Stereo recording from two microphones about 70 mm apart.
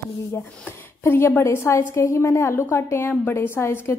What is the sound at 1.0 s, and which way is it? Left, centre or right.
A woman's voice, left.